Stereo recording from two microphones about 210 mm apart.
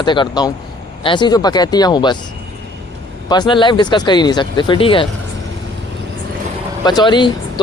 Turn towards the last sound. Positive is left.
turn(degrees=20)  # may be behind; listen again after turning